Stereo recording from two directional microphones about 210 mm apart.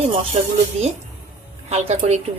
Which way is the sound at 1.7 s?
30° right (ahead or behind).